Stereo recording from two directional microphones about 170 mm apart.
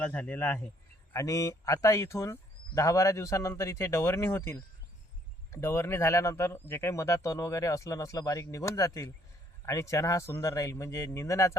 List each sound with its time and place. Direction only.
0.0 s speech: 10° left (ahead or behind)